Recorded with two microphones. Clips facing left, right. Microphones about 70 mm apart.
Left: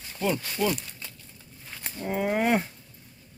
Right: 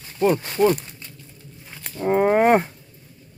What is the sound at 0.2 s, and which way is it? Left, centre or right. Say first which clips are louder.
Speech: right 9 dB; right.